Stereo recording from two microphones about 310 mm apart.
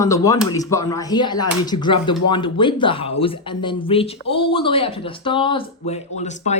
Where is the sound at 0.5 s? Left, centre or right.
Centre.